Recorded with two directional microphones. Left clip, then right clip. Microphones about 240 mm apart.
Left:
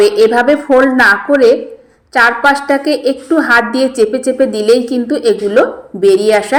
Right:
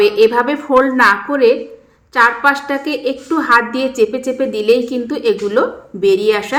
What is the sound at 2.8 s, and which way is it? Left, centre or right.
A woman's voice, centre.